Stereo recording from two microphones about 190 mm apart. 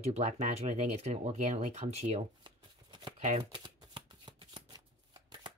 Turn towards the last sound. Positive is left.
turn(degrees=-25)  # may be behind; listen again after turning